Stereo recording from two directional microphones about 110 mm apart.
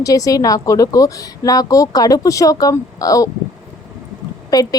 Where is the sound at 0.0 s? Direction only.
30° left (ahead or behind).